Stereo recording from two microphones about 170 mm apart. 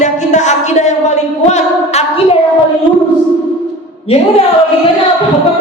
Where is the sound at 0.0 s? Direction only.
45° left (ahead or behind).